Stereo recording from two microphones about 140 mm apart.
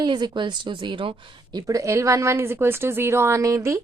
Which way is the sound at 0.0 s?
35° right (ahead or behind).